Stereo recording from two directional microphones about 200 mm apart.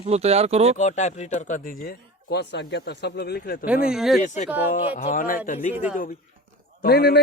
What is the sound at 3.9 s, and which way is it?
Speech, centre (ahead or behind).